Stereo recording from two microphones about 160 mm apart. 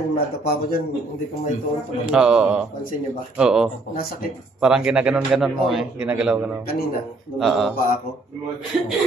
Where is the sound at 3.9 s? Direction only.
65° left (ahead or behind).